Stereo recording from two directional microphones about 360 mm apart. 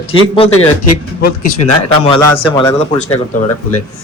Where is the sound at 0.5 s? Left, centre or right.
Left.